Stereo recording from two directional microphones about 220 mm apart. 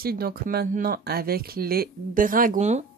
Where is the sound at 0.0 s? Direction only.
45° right (ahead or behind).